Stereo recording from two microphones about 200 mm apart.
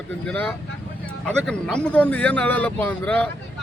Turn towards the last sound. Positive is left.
turn(degrees=5)  # may be behind; listen again after turning